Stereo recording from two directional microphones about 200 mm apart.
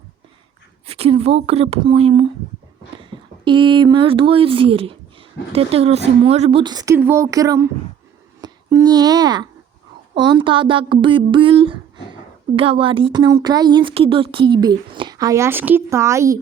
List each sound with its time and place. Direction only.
0.9 s speech: 30° right (ahead or behind)
8.4 s a sound: 20° right (ahead or behind)
10.2 s speech: 25° right (ahead or behind)